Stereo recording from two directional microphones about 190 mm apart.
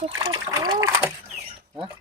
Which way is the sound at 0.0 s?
25° right (ahead or behind).